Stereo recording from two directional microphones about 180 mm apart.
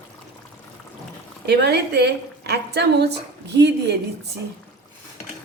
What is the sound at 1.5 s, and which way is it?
A woman's voice, 70° right (ahead or behind).